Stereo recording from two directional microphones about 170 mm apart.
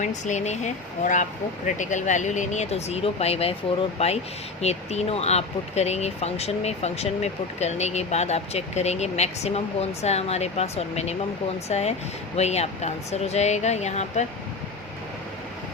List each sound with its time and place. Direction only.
0.0 s speech: 45° left (ahead or behind)